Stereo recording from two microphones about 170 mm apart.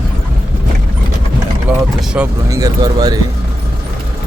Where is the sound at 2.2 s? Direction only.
10° right (ahead or behind).